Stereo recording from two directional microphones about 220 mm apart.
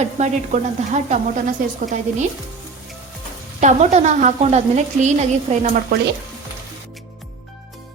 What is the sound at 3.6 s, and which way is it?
Sizzle, 30° right (ahead or behind).